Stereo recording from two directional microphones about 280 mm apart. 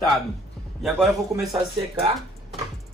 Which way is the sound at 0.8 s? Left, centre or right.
Centre.